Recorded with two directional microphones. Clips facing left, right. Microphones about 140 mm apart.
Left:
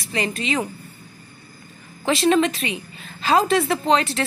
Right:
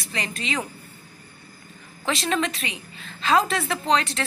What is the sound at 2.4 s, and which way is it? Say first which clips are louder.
A woman's voice: left 7 dB; centre (ahead or behind).